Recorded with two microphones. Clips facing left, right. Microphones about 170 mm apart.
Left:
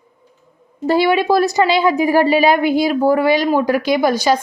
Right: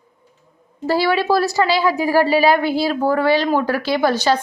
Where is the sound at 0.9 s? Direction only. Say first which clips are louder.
Left 3 dB; 20° left (ahead or behind).